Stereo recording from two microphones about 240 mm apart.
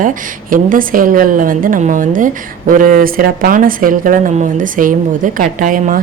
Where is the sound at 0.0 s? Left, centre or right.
Right.